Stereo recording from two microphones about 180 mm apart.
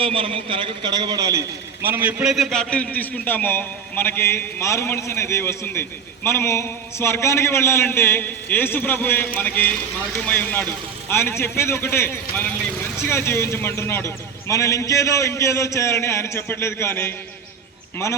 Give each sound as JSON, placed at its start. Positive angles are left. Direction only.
{"t": 0.0, "sound": "a man's voice", "side_deg": -30}